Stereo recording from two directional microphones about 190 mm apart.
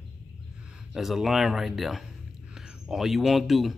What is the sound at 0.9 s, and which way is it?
Speech, centre (ahead or behind).